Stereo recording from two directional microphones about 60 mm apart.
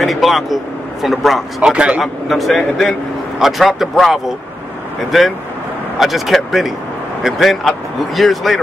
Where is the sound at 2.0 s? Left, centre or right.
Centre.